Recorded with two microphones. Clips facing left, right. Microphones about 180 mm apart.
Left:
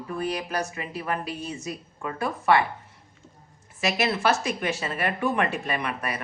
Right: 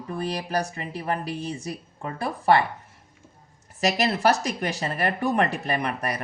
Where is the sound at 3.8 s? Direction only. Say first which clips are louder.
Right 2 dB; 40° right (ahead or behind).